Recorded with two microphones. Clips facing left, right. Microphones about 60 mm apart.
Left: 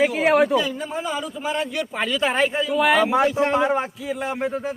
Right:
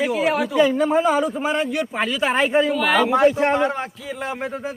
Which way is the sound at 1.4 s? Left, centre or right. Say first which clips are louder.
Right 3 dB; right.